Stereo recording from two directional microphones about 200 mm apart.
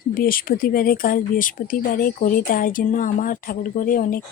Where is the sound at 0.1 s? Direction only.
45° left (ahead or behind).